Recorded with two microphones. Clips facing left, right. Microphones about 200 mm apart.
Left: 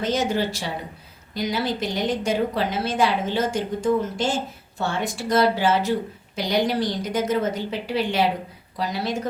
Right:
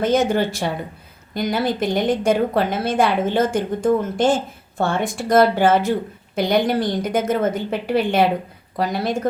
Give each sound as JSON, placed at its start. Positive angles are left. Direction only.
{"t": 0.0, "sound": "a woman's voice", "side_deg": -55}